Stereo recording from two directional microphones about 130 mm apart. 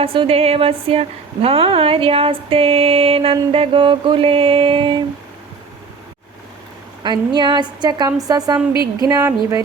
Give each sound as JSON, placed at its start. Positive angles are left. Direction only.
{"t": 0.0, "sound": "a woman's voice", "side_deg": -45}
{"t": 7.0, "sound": "a woman's voice", "side_deg": -35}
{"t": 9.0, "sound": "a sound", "side_deg": -25}